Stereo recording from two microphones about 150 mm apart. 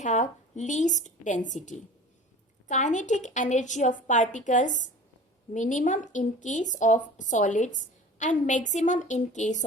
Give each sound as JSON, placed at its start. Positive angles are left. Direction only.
{"t": 0.0, "sound": "a woman's voice", "side_deg": 55}